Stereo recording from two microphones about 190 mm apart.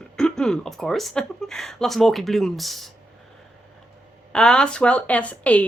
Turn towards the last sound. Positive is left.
turn(degrees=5)  # may be behind; listen again after turning